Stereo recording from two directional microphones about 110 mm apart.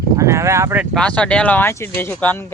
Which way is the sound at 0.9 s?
10° left (ahead or behind).